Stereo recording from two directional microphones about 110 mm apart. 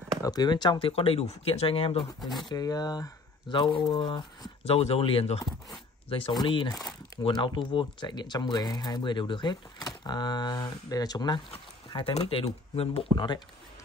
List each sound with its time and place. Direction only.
0.2 s speech: 40° left (ahead or behind); by 2.0 s 60° left (ahead or behind)
2.4 s speech: 35° left (ahead or behind)
4.6 s speech: 65° left (ahead or behind); by 12.3 s 40° left (ahead or behind)
12.4 s speech: 60° left (ahead or behind)
13.1 s speech: 40° left (ahead or behind)